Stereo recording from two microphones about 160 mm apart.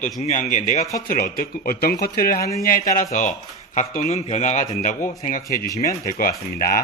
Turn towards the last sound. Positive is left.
turn(degrees=65)  # may be behind; listen again after turning